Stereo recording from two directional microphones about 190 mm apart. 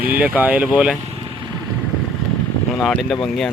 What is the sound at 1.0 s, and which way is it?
Vehicle, 25° right (ahead or behind).